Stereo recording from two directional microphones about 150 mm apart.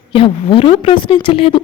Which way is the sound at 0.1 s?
35° left (ahead or behind).